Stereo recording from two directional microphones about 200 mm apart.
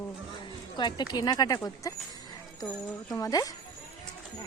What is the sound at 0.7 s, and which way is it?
Speech, 20° left (ahead or behind).